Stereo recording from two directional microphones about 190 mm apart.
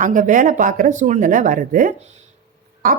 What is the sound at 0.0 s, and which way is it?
Speech, 45° right (ahead or behind).